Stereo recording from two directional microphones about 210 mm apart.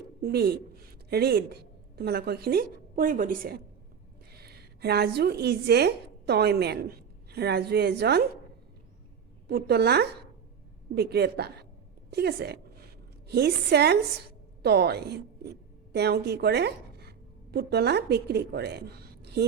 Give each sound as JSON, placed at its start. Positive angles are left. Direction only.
{"t": 0.2, "sound": "a woman's voice", "side_deg": -50}
{"t": 9.5, "sound": "a woman's voice", "side_deg": -50}